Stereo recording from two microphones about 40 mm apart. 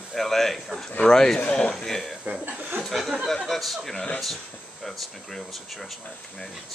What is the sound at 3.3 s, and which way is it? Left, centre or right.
Speech, centre.